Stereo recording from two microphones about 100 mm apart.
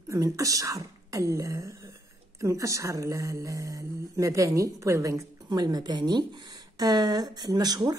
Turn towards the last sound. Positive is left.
turn(degrees=-45)  # may be behind; listen again after turning